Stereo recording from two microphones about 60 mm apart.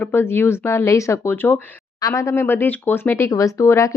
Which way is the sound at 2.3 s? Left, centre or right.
Left.